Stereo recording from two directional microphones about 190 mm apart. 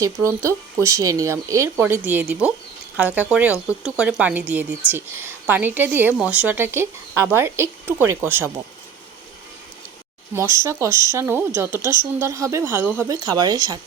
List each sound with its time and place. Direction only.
0.0 s a woman's voice: 15° right (ahead or behind)
10.3 s a woman's voice: 15° right (ahead or behind)